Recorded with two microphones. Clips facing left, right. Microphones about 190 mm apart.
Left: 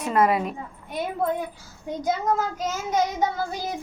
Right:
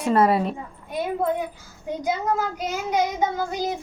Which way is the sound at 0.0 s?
30° right (ahead or behind).